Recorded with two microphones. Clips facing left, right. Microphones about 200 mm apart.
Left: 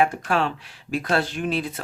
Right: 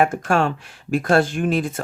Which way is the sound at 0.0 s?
45° right (ahead or behind).